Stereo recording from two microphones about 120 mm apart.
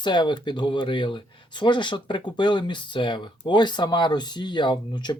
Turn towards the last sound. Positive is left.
turn(degrees=40)  # may be behind; listen again after turning